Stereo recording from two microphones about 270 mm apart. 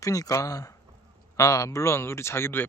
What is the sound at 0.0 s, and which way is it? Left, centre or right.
Speech, centre.